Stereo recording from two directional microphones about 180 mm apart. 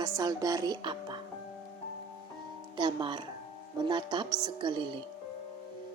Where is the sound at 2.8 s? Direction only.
25° right (ahead or behind).